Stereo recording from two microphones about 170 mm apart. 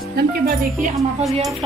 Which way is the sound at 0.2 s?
75° right (ahead or behind).